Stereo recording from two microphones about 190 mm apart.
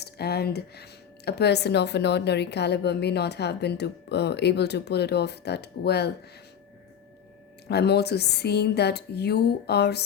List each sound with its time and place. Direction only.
0.0 s speech: 60° left (ahead or behind)
7.7 s speech: 60° left (ahead or behind)